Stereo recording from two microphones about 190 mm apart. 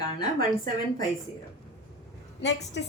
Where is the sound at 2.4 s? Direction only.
65° left (ahead or behind).